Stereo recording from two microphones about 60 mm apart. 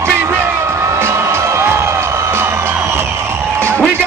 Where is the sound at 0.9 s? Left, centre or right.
Right.